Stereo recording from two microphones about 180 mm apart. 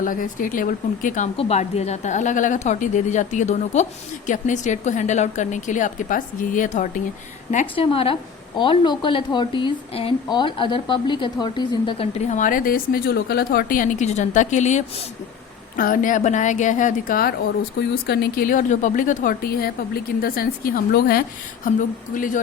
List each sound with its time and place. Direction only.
0.0 s a woman's voice: 50° left (ahead or behind); by 12.0 s 25° left (ahead or behind)
12.2 s a woman's voice: 45° left (ahead or behind)
17.7 s speech: 65° left (ahead or behind); by 22.4 s 45° left (ahead or behind)